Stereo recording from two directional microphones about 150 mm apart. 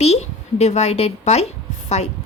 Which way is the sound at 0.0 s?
45° left (ahead or behind).